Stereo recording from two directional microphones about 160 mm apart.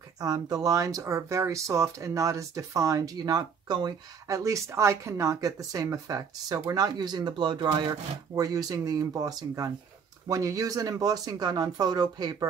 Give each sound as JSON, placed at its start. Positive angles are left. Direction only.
{"t": 0.2, "sound": "speech", "side_deg": -25}